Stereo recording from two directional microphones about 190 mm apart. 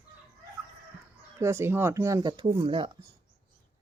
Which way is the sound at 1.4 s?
15° right (ahead or behind).